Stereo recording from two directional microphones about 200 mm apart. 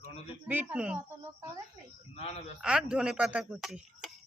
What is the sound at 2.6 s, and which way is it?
Speech, 5° right (ahead or behind).